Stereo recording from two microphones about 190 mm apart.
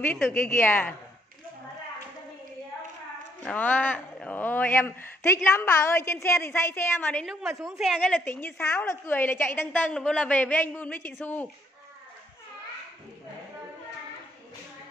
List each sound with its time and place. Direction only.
0.0 s speech: 10° left (ahead or behind)
3.4 s speech: 10° left (ahead or behind)
7.5 s a woman's voice: 15° right (ahead or behind)
7.8 s speech: 5° left (ahead or behind)